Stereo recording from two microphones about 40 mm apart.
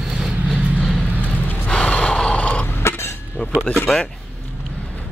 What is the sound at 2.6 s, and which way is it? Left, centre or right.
Cough, left.